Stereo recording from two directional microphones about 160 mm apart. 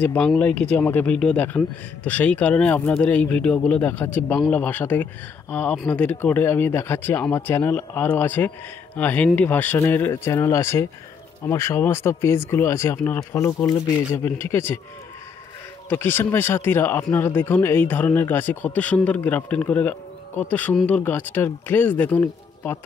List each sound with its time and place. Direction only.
0.0 s speech: 10° left (ahead or behind)
15.9 s speech: 15° left (ahead or behind)